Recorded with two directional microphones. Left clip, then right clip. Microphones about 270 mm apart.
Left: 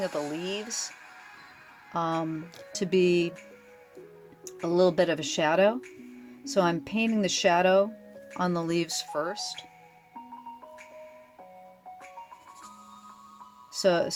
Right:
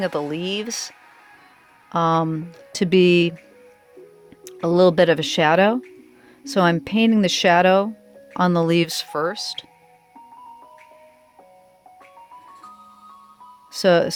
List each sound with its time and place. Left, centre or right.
0.0 s speech: right
1.9 s speech: right
4.4 s speech: right
13.7 s speech: right